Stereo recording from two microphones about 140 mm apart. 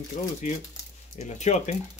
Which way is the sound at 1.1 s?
55° left (ahead or behind).